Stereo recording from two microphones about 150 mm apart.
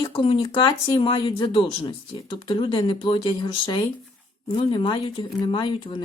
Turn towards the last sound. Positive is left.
turn(degrees=30)  # may be behind; listen again after turning